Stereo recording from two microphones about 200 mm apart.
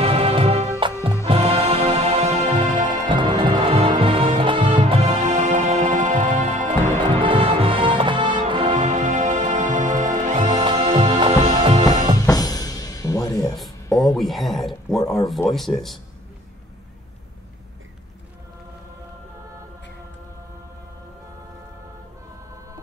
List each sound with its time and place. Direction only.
0.0 s music: 30° right (ahead or behind)
8.7 s music: 35° right (ahead or behind)
10.6 s music: 25° right (ahead or behind)
12.3 s music: 20° left (ahead or behind)
14.1 s a sound: centre (ahead or behind)
15.0 s a sound: 15° left (ahead or behind)
15.5 s speech: centre (ahead or behind)